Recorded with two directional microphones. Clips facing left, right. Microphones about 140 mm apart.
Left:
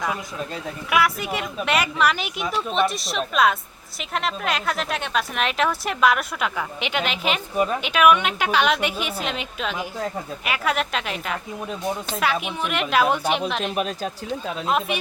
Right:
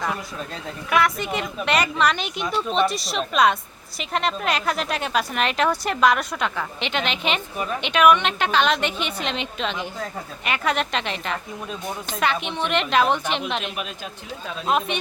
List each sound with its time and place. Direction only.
0.0 s a woman's voice: 5° left (ahead or behind)
13.7 s speech: 40° left (ahead or behind)
14.7 s speech: centre (ahead or behind)